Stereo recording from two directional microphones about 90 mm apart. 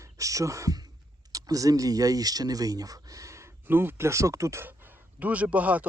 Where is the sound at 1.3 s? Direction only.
40° right (ahead or behind).